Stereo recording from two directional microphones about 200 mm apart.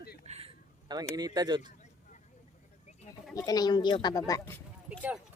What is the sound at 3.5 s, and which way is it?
A woman's voice, 20° left (ahead or behind).